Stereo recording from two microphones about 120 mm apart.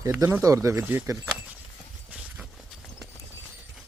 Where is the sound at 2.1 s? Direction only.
10° right (ahead or behind).